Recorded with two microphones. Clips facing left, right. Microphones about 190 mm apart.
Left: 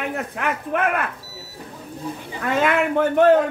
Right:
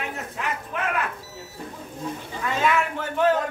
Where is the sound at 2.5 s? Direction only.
55° left (ahead or behind).